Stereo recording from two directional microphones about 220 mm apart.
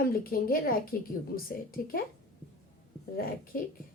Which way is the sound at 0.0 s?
40° left (ahead or behind).